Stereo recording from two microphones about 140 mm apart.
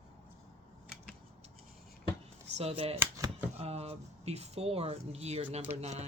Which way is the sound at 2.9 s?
25° right (ahead or behind).